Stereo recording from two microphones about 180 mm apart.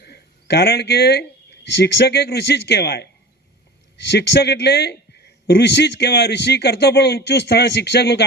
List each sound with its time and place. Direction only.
0.0 s a man's voice: 65° left (ahead or behind)